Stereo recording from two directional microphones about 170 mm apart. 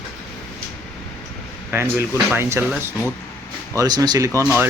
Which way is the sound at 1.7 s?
15° right (ahead or behind).